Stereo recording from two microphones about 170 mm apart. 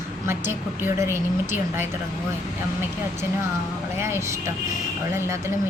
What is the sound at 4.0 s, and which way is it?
Speech, 15° right (ahead or behind).